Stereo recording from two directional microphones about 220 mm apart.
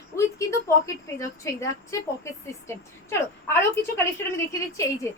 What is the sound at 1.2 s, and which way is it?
Speech, 15° left (ahead or behind).